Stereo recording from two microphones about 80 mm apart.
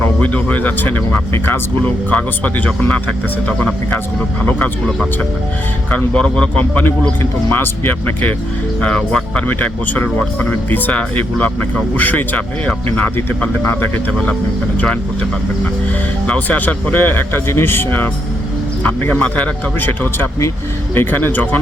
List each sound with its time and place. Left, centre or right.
0.2 s speech: centre
5.9 s speech: centre
6.6 s speech: left
8.8 s speech: centre
9.5 s speech: left